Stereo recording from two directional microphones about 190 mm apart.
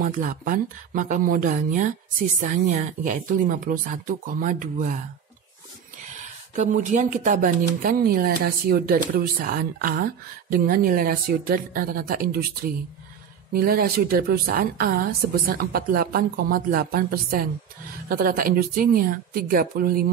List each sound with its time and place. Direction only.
0.0 s a woman's voice: 45° right (ahead or behind)
6.5 s a woman's voice: 40° right (ahead or behind)